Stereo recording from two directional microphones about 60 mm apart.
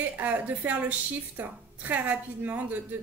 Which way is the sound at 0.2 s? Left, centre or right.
Right.